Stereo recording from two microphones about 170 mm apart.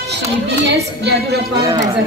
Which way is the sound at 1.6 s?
20° right (ahead or behind).